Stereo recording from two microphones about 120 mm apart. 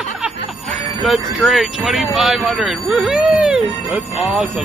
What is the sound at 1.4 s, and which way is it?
Music, 5° right (ahead or behind).